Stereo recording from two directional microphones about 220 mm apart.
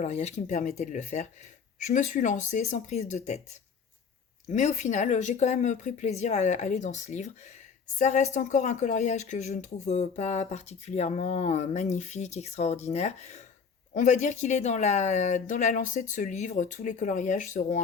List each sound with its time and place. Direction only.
0.0 s speech: 30° left (ahead or behind)
4.4 s speech: 30° left (ahead or behind)